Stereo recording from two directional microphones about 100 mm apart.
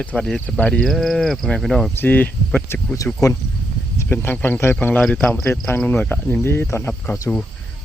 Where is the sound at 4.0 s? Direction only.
20° left (ahead or behind).